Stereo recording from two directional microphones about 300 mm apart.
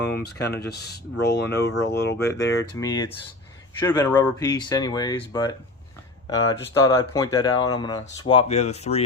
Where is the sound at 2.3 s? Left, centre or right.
Centre.